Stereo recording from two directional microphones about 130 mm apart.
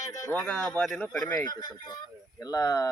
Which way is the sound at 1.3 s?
30° left (ahead or behind).